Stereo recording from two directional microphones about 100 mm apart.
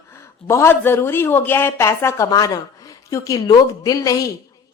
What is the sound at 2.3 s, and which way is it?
A woman's voice, 40° left (ahead or behind).